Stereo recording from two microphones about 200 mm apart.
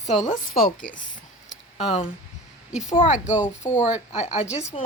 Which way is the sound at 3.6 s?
40° left (ahead or behind).